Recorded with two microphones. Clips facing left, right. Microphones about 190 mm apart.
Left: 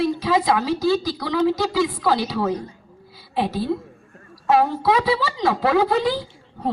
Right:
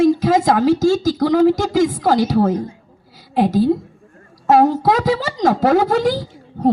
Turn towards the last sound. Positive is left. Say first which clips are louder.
# right 9 dB
turn(degrees=-45)  # may be behind; listen again after turning